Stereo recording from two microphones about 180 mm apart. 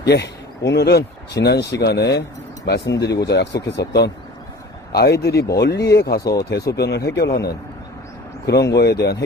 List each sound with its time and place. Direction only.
0.0 s speech: 65° left (ahead or behind)
8.7 s speech: 65° left (ahead or behind)